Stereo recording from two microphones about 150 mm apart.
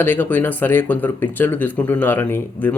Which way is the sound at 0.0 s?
15° left (ahead or behind).